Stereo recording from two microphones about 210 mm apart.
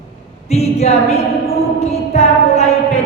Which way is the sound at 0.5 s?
30° left (ahead or behind).